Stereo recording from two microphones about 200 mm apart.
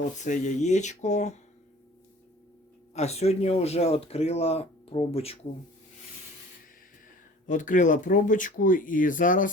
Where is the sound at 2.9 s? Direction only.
35° left (ahead or behind).